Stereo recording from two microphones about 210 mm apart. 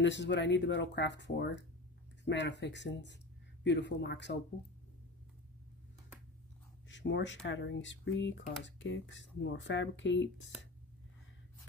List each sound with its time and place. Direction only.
0.0 s speech: 60° left (ahead or behind)
6.9 s speech: 55° left (ahead or behind)